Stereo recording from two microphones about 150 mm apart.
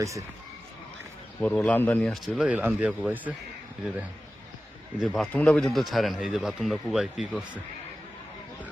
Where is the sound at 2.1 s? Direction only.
Centre (ahead or behind).